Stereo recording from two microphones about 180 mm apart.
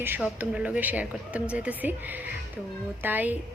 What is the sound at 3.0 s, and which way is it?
Speech, 10° right (ahead or behind).